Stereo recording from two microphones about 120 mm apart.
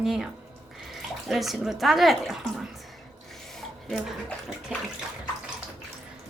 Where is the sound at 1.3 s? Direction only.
Centre (ahead or behind).